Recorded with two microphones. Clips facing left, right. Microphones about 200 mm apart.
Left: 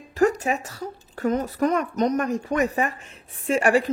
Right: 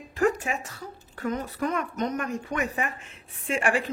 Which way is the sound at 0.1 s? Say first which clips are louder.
Left 4 dB; 40° left (ahead or behind).